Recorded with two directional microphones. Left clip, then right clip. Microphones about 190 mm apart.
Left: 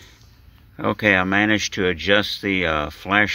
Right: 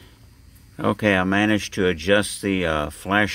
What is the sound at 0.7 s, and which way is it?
Speech, 20° right (ahead or behind).